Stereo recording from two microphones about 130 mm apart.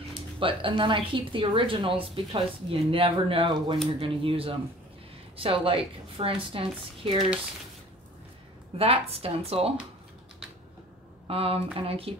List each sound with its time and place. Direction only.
0.4 s a woman's voice: 40° right (ahead or behind)
8.7 s a woman's voice: 50° right (ahead or behind)
11.2 s a woman's voice: 50° right (ahead or behind)